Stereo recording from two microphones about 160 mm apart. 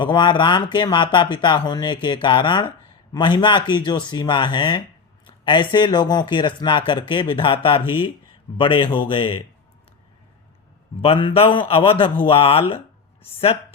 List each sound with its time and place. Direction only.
0.0 s speech: 30° left (ahead or behind)
11.0 s speech: 35° left (ahead or behind)